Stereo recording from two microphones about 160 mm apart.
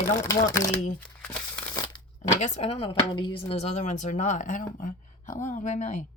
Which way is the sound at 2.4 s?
45° left (ahead or behind).